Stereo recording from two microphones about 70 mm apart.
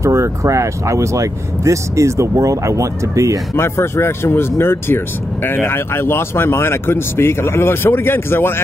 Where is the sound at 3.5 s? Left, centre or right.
Left.